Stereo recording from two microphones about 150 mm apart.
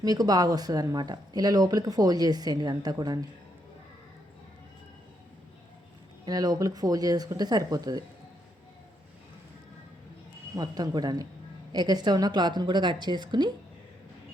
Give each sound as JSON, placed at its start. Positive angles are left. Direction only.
{"t": 0.0, "sound": "speech", "side_deg": -25}
{"t": 6.2, "sound": "speech", "side_deg": -25}
{"t": 10.5, "sound": "speech", "side_deg": -25}